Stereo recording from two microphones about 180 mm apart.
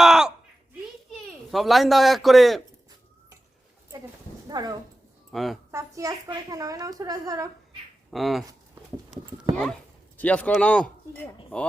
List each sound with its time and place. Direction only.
0.0 s a sound: centre (ahead or behind)
1.1 s a child's voice: centre (ahead or behind)
4.4 s speech: 20° right (ahead or behind)
5.3 s a woman's voice: centre (ahead or behind)
5.7 s a woman's voice: 20° right (ahead or behind)
8.1 s speech: centre (ahead or behind)
10.2 s speech: 10° left (ahead or behind)